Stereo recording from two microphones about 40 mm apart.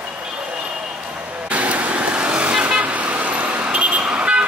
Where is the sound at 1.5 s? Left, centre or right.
Right.